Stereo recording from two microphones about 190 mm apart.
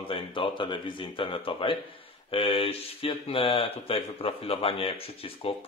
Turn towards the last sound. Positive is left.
turn(degrees=30)  # may be behind; listen again after turning